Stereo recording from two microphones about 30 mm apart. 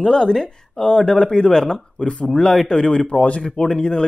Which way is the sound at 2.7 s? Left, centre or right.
Left.